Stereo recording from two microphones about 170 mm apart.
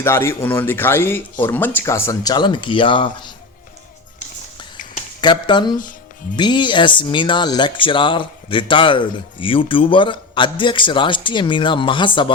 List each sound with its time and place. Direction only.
0.0 s speech: 15° left (ahead or behind)
5.2 s speech: 25° left (ahead or behind)